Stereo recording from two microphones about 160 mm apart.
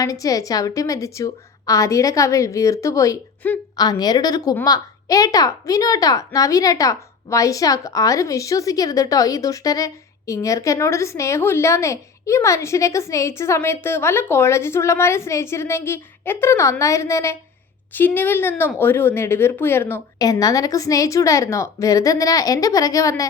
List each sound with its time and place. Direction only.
0.0 s a child's voice: 20° left (ahead or behind)